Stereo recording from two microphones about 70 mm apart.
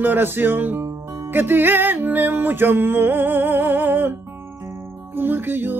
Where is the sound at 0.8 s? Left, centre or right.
Right.